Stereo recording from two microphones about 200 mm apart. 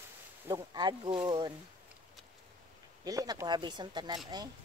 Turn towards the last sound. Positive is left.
turn(degrees=-20)  # may be behind; listen again after turning